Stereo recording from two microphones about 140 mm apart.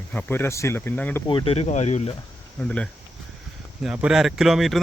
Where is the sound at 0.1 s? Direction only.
15° left (ahead or behind).